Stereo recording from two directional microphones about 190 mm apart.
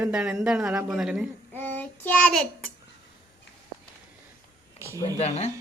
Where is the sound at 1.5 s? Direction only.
10° left (ahead or behind).